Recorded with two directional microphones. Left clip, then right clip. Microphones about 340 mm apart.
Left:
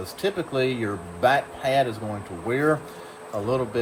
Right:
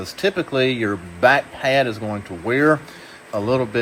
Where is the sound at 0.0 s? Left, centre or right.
Right.